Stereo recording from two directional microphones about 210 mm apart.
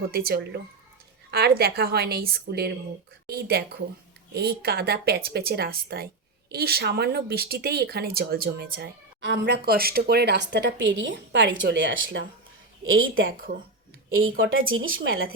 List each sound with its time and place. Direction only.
0.1 s a woman's voice: 50° right (ahead or behind); by 15.0 s 70° right (ahead or behind)